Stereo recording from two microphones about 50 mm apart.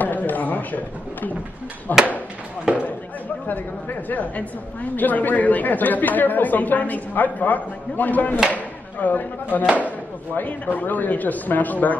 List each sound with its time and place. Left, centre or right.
0.0 s a sound: left
1.9 s speech: left
4.1 s speech: left